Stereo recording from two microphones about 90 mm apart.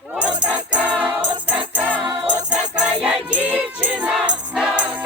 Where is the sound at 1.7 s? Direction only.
15° right (ahead or behind).